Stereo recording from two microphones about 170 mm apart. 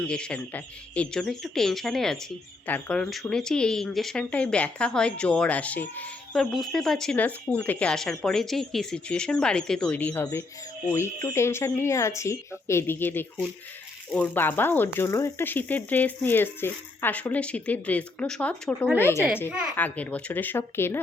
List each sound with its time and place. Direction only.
0.0 s speech: 5° left (ahead or behind)